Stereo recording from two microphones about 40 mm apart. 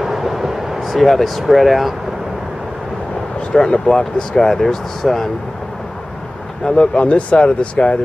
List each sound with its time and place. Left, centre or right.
0.0 s vehicle: centre
1.4 s speech: centre
3.5 s speech: centre
6.6 s speech: centre
7.0 s speech: left